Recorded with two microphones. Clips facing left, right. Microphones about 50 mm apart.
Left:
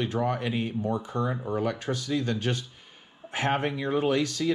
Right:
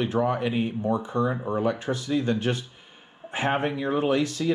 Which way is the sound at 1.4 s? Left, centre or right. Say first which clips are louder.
Right 2 dB; right.